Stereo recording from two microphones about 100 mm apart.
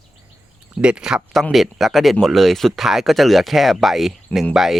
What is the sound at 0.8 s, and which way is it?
Speech, 10° right (ahead or behind).